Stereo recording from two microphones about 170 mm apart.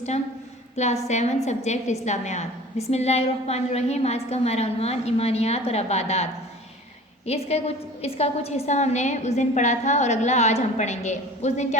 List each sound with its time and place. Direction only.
1.0 s a woman's voice: 40° left (ahead or behind)
7.3 s a woman's voice: 35° left (ahead or behind)